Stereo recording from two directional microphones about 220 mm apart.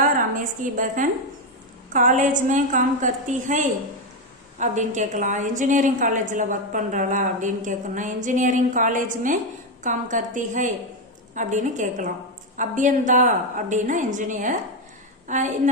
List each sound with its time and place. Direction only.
0.3 s a woman's voice: 35° right (ahead or behind)